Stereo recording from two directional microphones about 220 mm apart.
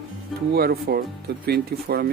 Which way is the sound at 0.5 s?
45° right (ahead or behind).